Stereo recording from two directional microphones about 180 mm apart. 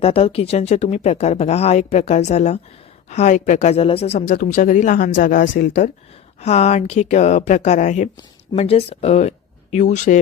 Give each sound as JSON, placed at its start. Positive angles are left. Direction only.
{"t": 0.0, "sound": "speech", "side_deg": 30}